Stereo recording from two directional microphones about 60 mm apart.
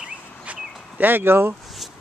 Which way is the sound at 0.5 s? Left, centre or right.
Right.